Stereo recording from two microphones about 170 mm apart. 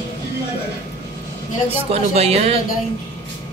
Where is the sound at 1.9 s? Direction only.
40° right (ahead or behind).